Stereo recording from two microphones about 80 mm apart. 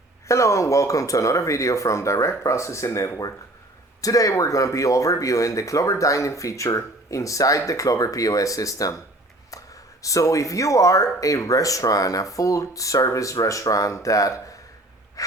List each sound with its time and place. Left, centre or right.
0.3 s speech: left